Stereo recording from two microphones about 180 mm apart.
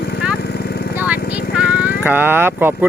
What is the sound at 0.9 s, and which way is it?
Vehicle, 10° right (ahead or behind).